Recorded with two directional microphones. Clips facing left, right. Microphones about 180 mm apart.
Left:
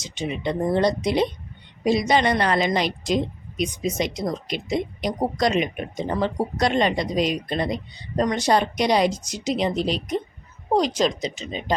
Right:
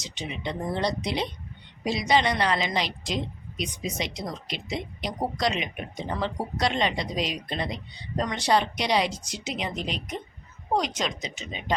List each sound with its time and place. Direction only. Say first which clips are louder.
0.0 s a woman's voice: left 7 dB; 50° left (ahead or behind)